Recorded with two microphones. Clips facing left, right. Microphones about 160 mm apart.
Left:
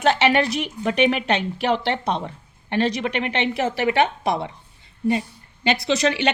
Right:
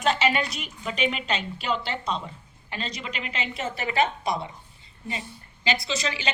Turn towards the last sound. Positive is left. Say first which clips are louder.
# left 10 dB
turn(degrees=65)  # may be behind; listen again after turning